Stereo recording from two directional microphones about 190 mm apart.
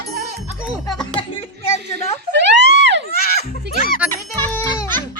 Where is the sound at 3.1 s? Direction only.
55° left (ahead or behind).